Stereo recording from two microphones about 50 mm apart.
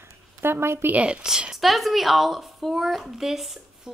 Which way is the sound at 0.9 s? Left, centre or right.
Right.